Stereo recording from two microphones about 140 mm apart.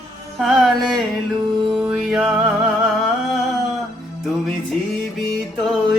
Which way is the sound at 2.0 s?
5° right (ahead or behind).